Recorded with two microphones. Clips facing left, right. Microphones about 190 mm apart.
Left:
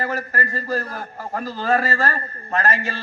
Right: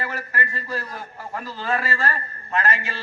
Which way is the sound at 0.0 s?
40° left (ahead or behind).